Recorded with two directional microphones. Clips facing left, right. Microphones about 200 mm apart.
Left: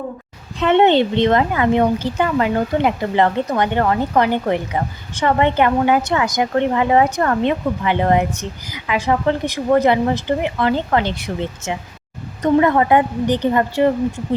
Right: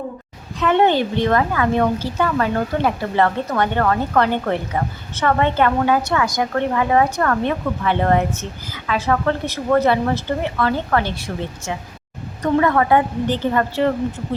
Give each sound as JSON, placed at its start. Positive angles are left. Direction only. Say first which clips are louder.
{"t": 0.6, "sound": "a woman's voice", "louder": "left 3 dB", "side_deg": 25}